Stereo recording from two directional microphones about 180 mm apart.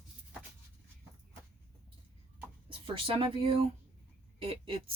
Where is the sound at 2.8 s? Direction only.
30° right (ahead or behind).